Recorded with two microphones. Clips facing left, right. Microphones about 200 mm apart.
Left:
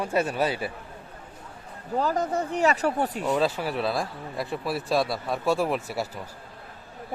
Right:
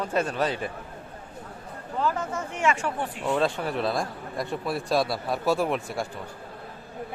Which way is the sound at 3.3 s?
5° left (ahead or behind).